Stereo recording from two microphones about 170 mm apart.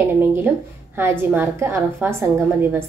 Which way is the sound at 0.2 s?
10° right (ahead or behind).